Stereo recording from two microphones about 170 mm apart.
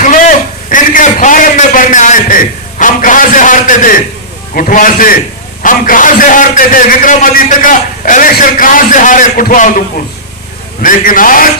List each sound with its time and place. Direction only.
0.0 s a man's voice: 50° left (ahead or behind)
10.8 s a man's voice: 55° left (ahead or behind)